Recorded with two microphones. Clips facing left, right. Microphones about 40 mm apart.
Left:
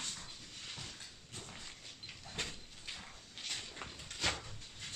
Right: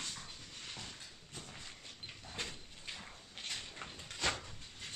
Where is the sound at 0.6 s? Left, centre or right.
Centre.